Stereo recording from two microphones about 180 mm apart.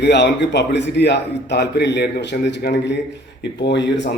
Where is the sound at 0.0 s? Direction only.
70° left (ahead or behind).